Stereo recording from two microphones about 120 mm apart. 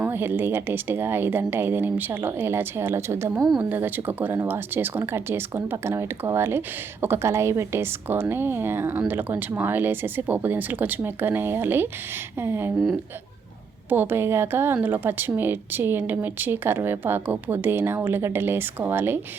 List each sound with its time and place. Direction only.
0.0 s speech: 20° right (ahead or behind)
13.9 s speech: 15° right (ahead or behind)